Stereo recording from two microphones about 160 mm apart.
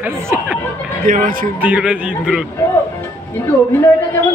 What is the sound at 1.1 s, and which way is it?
Speech, 60° right (ahead or behind).